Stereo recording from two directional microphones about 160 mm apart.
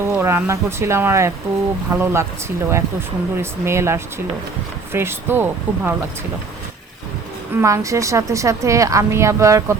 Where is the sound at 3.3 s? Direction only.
15° right (ahead or behind).